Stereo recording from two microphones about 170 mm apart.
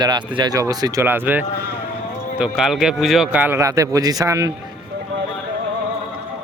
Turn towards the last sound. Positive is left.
turn(degrees=-20)  # may be behind; listen again after turning